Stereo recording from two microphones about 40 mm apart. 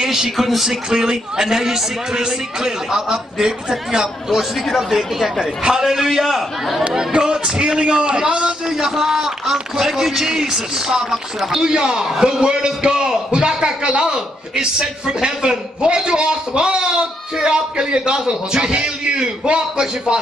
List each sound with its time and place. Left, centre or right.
0.0 s a man's voice: centre
0.7 s a man's voice: centre
7.1 s a man's voice: centre
8.6 s a man's voice: centre